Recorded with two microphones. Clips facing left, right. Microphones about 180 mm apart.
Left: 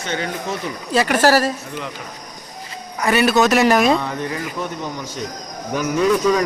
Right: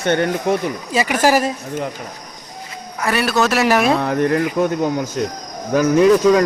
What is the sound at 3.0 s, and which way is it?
Speech, centre (ahead or behind).